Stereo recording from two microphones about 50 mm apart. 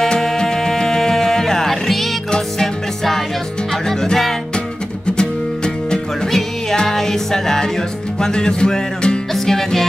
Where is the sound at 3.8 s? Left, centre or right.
Centre.